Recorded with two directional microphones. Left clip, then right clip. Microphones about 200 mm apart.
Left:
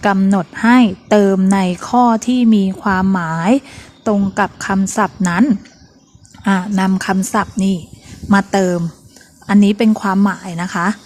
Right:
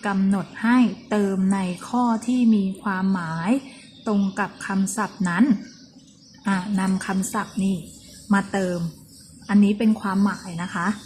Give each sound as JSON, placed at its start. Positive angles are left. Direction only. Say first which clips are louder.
{"t": 0.0, "sound": "speech", "louder": "left 10 dB", "side_deg": 50}